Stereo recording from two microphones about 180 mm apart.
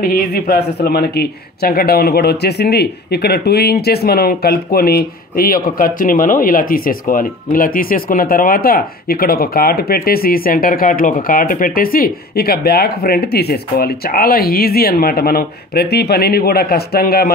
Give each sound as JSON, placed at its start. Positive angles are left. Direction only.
{"t": 0.0, "sound": "speech", "side_deg": 60}